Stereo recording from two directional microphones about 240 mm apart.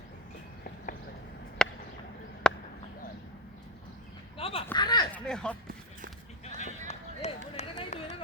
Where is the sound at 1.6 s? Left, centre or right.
Centre.